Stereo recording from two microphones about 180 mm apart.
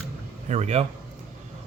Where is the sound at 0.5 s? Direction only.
35° right (ahead or behind).